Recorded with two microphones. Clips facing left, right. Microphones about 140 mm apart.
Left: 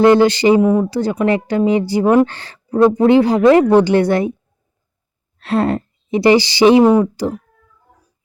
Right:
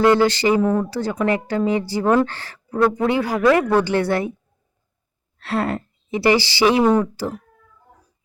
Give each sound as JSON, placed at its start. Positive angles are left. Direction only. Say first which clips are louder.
{"t": 0.0, "sound": "a woman's voice", "louder": "left 5 dB", "side_deg": 20}
{"t": 5.4, "sound": "speech", "louder": "left 6 dB", "side_deg": 20}